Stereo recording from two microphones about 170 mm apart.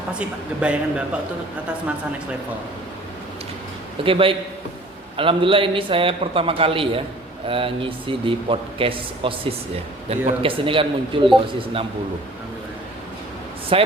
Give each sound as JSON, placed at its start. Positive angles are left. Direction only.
{"t": 0.2, "sound": "speech", "side_deg": -5}
{"t": 4.0, "sound": "speech", "side_deg": -30}
{"t": 13.7, "sound": "speech", "side_deg": -35}